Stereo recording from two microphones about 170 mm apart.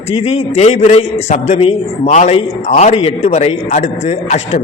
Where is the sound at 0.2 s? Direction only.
40° left (ahead or behind).